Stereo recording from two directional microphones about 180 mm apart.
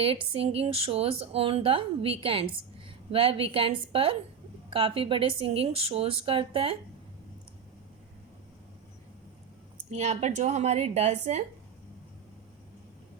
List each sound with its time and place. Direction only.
0.0 s speech: 30° right (ahead or behind)
9.9 s speech: 40° right (ahead or behind)